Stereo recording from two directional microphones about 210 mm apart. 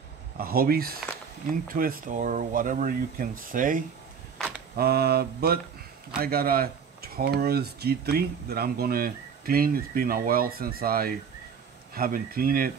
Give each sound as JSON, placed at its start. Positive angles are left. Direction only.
{"t": 0.4, "sound": "speech", "side_deg": -45}